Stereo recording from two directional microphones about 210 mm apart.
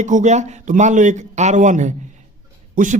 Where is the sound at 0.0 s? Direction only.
35° right (ahead or behind).